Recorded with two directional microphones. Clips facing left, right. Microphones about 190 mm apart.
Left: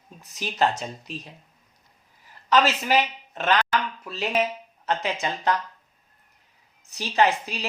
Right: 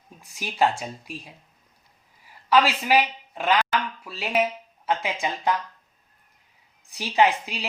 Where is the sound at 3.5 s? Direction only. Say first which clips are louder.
Even; 5° right (ahead or behind).